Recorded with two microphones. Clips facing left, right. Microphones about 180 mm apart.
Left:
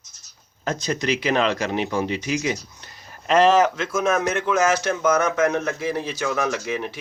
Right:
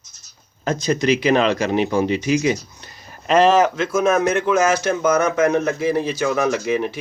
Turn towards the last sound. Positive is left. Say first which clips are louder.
# right 6 dB
turn(degrees=-10)  # may be behind; listen again after turning